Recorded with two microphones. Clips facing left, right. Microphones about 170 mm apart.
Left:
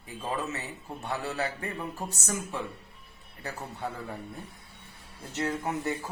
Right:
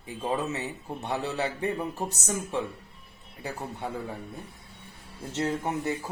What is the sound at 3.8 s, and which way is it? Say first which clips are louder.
Speech: right 1 dB; 15° right (ahead or behind).